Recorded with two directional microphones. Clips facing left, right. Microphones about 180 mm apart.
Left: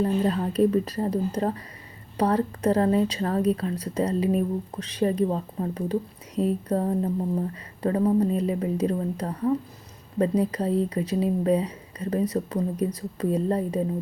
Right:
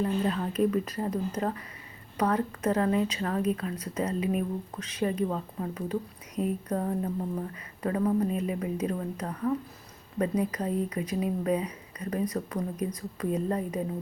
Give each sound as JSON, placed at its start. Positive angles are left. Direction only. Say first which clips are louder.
{"t": 0.0, "sound": "a woman's voice", "louder": "left 4 dB", "side_deg": 35}